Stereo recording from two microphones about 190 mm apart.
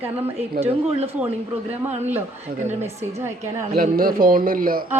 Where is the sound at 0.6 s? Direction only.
30° right (ahead or behind).